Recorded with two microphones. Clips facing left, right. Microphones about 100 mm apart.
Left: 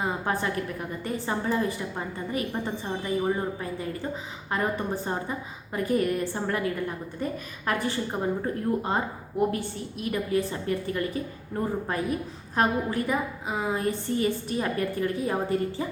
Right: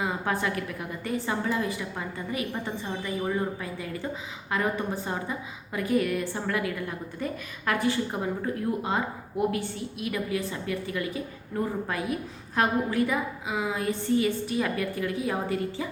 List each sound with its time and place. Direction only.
0.0 s a woman's voice: 35° left (ahead or behind)